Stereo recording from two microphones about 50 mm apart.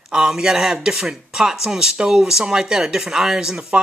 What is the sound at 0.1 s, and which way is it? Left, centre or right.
Speech, centre.